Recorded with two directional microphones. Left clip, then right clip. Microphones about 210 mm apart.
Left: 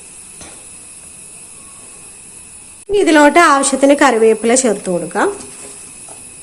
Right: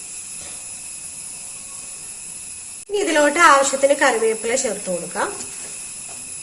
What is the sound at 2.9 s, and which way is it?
A woman's voice, 50° left (ahead or behind).